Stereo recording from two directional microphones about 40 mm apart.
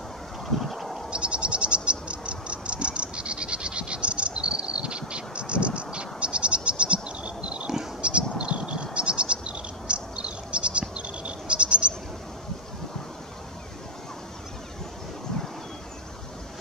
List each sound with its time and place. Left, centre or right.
0.5 s vehicle: centre
1.1 s a sound: right
8.0 s bird: right